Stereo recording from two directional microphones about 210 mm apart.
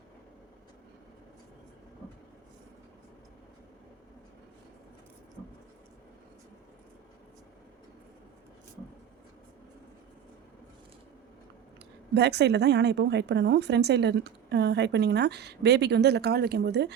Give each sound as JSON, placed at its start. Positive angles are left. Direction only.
{"t": 12.1, "sound": "a woman's voice", "side_deg": -55}